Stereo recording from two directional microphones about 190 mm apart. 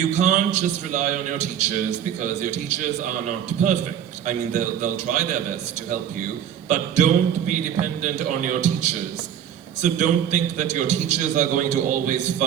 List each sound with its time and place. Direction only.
0.0 s a man's voice: 40° right (ahead or behind)
4.3 s a man's voice: 40° right (ahead or behind)
6.7 s a man's voice: 40° right (ahead or behind)